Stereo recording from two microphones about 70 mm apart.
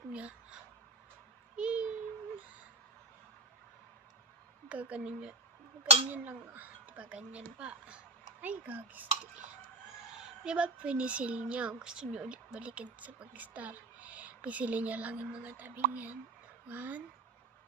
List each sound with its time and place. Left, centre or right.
0.1 s a sound: centre
4.7 s a woman's voice: centre
10.4 s speech: centre